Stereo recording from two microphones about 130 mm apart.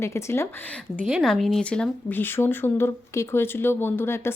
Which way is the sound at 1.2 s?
Centre (ahead or behind).